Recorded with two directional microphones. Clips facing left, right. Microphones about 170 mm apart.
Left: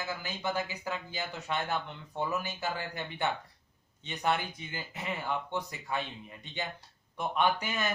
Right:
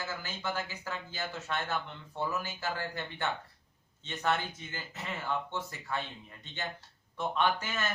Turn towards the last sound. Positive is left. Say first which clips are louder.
# left 1 dB
turn(degrees=15)  # may be behind; listen again after turning